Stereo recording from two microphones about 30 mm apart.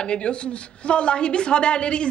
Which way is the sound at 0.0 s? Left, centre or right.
Left.